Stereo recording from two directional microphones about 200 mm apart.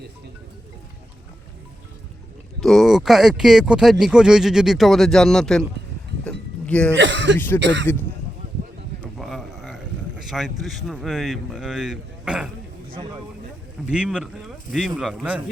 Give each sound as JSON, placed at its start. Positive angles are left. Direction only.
{"t": 2.6, "sound": "speech", "side_deg": 0}
{"t": 6.2, "sound": "cowbell", "side_deg": 5}
{"t": 6.9, "sound": "speech", "side_deg": -65}
{"t": 7.3, "sound": "speech", "side_deg": 10}
{"t": 7.6, "sound": "speech", "side_deg": -60}
{"t": 9.1, "sound": "a sound", "side_deg": 0}
{"t": 10.2, "sound": "speech", "side_deg": 0}
{"t": 13.9, "sound": "speech", "side_deg": -5}